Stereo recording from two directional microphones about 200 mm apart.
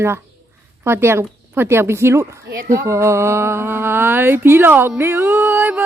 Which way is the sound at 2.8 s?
15° right (ahead or behind).